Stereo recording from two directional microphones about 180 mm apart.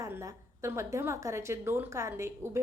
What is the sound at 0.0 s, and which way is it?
A woman's voice, 15° right (ahead or behind).